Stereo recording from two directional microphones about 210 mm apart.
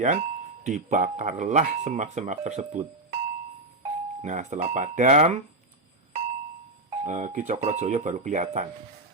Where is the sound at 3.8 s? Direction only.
35° right (ahead or behind).